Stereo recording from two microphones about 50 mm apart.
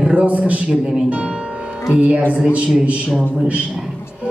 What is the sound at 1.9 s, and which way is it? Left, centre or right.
A woman's voice, right.